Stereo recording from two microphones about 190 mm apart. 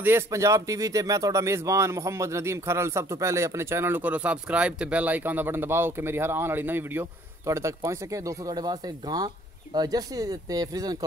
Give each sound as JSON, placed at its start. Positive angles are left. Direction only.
{"t": 0.0, "sound": "speech", "side_deg": -15}